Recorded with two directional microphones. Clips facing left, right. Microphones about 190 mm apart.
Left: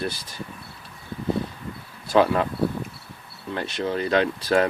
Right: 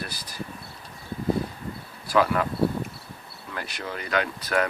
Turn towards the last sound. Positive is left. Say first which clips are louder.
# left 5 dB
turn(degrees=30)  # may be behind; listen again after turning